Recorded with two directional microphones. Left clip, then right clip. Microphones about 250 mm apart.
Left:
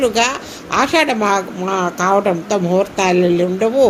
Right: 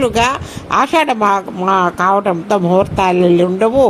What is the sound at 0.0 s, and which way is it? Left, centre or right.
Speech, right.